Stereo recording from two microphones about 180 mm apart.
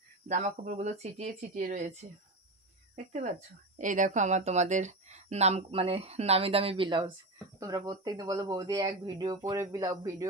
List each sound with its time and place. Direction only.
0.3 s speech: 40° right (ahead or behind)
3.1 s speech: 40° right (ahead or behind); by 10.2 s 20° right (ahead or behind)